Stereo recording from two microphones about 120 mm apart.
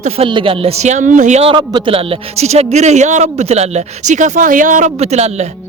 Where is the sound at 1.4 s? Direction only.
40° right (ahead or behind); by 5.4 s 65° right (ahead or behind).